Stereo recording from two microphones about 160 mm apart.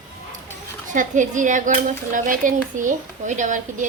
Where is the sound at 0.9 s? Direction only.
50° right (ahead or behind).